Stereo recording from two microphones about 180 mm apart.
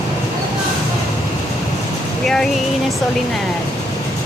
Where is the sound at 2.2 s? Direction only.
5° left (ahead or behind).